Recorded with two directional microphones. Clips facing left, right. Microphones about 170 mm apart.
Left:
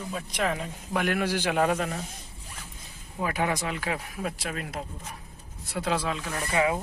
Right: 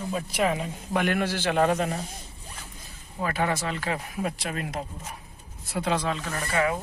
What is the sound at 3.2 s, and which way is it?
Speech, 15° left (ahead or behind).